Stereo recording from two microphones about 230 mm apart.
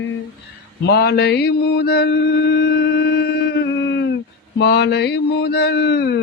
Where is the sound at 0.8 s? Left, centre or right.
Left.